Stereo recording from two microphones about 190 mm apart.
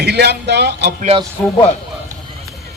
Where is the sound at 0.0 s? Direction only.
60° right (ahead or behind).